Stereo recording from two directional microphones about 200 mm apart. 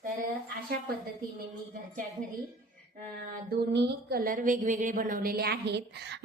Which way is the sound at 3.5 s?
50° right (ahead or behind).